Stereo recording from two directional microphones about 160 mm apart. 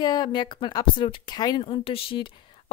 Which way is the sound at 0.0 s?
25° left (ahead or behind).